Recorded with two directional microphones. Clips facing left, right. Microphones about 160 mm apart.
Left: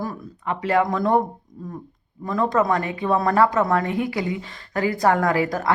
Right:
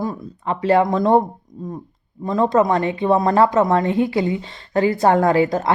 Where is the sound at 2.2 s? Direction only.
25° right (ahead or behind).